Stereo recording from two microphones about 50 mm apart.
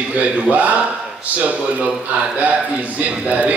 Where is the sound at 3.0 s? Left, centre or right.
Right.